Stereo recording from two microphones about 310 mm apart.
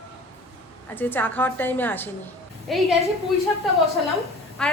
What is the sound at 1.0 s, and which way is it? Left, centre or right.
A woman's voice, centre.